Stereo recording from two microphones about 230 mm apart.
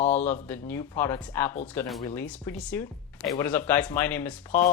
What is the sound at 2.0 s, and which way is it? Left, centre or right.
Speech, centre.